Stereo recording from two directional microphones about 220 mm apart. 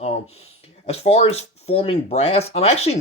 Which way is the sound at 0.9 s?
30° left (ahead or behind).